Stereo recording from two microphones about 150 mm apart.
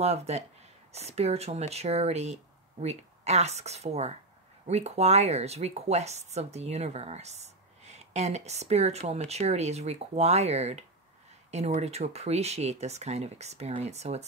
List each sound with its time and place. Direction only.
0.0 s speech: 45° right (ahead or behind)